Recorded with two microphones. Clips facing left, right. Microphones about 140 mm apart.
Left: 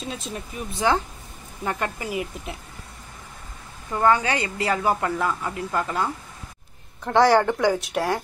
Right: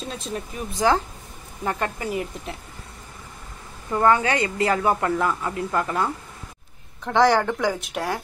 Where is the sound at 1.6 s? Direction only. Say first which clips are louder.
Right 1 dB; 30° right (ahead or behind).